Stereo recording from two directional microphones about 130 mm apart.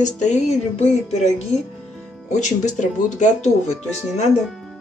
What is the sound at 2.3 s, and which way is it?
Speech, 70° left (ahead or behind).